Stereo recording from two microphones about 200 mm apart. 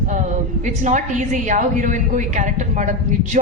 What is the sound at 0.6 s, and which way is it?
A woman's voice, 40° right (ahead or behind).